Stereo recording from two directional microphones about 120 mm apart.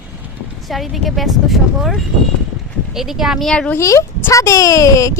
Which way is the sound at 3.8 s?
25° left (ahead or behind).